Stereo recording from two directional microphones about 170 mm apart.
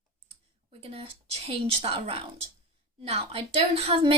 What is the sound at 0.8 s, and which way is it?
A woman's voice, 35° right (ahead or behind).